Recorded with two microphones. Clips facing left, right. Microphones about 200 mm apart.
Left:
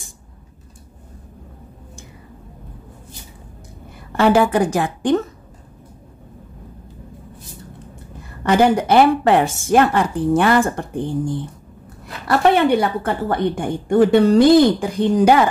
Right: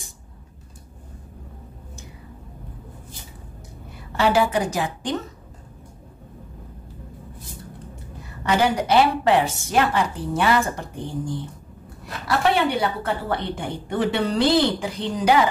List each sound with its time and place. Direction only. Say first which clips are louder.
4.2 s a woman's voice: left 5 dB; 50° left (ahead or behind)
8.5 s a woman's voice: left 5 dB; 50° left (ahead or behind)